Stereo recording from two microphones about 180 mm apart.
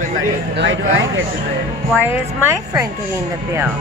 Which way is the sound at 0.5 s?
80° right.